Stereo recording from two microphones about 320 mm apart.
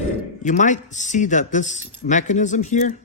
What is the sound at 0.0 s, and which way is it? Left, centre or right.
Speech, left.